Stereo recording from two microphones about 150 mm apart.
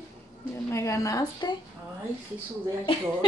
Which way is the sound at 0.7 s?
20° left (ahead or behind).